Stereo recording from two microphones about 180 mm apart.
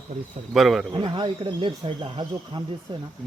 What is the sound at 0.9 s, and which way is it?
Speech, 25° right (ahead or behind).